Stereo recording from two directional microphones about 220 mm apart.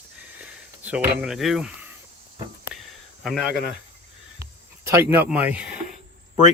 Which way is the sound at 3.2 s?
Centre (ahead or behind).